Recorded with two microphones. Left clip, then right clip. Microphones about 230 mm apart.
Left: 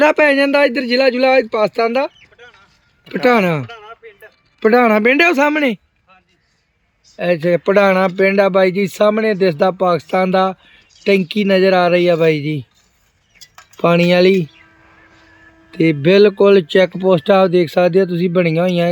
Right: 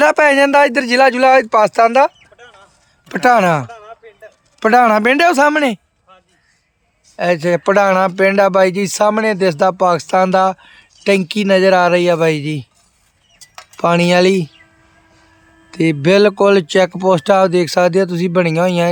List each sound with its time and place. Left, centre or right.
0.0 s speech: centre
2.1 s a sound: right
3.1 s speech: centre
3.7 s a sound: right
4.6 s speech: centre
7.4 s speech: centre
13.4 s a sound: right
13.7 s speech: centre
15.8 s speech: centre